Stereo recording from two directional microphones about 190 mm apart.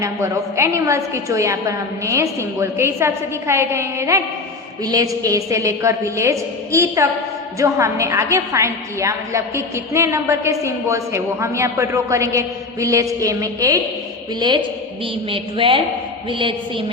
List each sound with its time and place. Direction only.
0.0 s a woman's voice: 15° right (ahead or behind)